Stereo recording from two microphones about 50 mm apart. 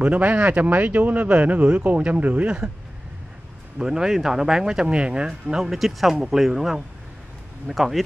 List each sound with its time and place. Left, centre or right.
0.0 s speech: right
3.7 s speech: centre
5.6 s speech: centre